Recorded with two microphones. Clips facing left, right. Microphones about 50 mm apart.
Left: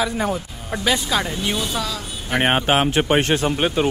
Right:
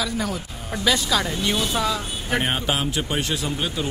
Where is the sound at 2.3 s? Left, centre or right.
Left.